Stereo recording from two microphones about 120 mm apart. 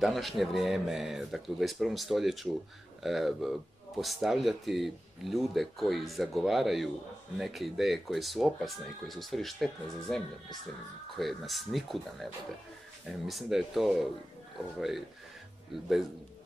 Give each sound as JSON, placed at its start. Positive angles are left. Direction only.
{"t": 0.0, "sound": "speech", "side_deg": 0}
{"t": 13.3, "sound": "speech", "side_deg": 0}